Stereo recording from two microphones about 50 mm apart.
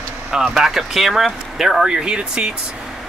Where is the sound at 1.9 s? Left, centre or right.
Centre.